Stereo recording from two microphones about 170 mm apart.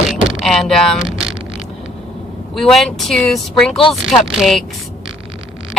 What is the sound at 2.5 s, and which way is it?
Speech, centre (ahead or behind).